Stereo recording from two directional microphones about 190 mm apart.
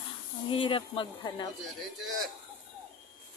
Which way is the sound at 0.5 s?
25° left (ahead or behind).